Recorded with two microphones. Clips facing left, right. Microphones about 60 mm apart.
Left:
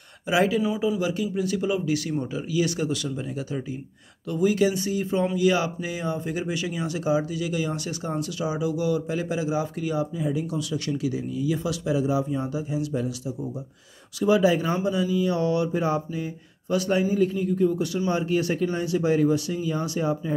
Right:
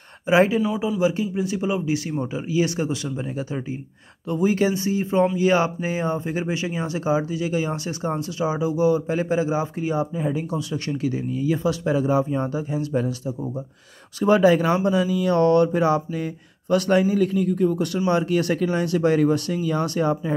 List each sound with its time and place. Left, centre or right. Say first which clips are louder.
0.3 s speech: right 4 dB; right
0.7 s speech: right 3 dB; centre; by 13.1 s right
14.2 s speech: right 4 dB; right